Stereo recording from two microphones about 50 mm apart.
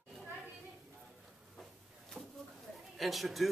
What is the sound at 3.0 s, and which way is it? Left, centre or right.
Speech, centre.